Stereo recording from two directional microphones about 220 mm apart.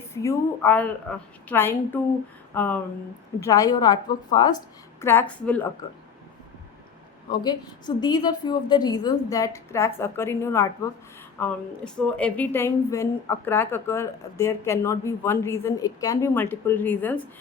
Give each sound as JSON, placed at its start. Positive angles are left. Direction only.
{"t": 0.1, "sound": "a woman's voice", "side_deg": 15}
{"t": 7.3, "sound": "speech", "side_deg": 20}